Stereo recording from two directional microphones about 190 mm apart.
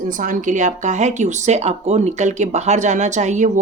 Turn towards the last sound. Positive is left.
turn(degrees=-40)  # may be behind; listen again after turning